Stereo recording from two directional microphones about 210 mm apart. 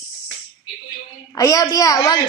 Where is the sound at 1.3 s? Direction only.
15° left (ahead or behind).